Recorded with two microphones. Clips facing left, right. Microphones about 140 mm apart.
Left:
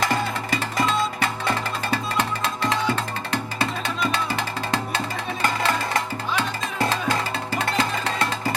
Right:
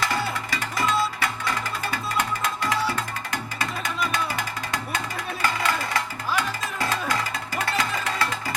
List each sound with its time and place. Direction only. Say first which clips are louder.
0.5 s music: left 2 dB; 30° left (ahead or behind)